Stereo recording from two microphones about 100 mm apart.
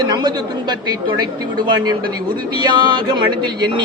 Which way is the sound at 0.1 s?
45° right (ahead or behind).